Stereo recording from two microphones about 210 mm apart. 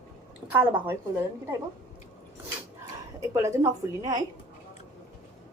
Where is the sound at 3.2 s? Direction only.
15° right (ahead or behind).